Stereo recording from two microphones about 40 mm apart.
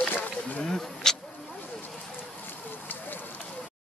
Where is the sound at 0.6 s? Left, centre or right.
Centre.